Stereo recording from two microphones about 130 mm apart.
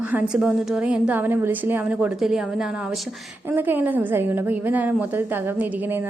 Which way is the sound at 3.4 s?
15° right (ahead or behind).